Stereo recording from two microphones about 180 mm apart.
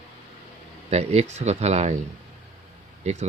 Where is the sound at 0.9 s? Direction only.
35° right (ahead or behind).